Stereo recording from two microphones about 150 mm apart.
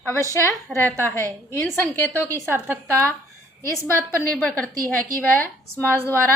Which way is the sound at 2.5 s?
15° right (ahead or behind).